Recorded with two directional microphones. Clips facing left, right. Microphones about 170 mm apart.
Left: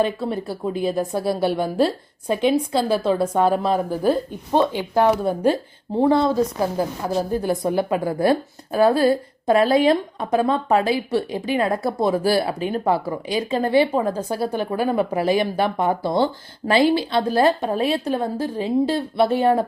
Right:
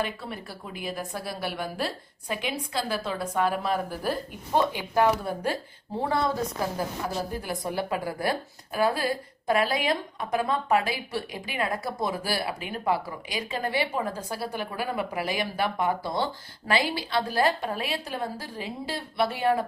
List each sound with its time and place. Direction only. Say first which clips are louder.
0.0 s a woman's voice: left 10 dB; 25° left (ahead or behind)
7.4 s a woman's voice: left 9 dB; 25° left (ahead or behind)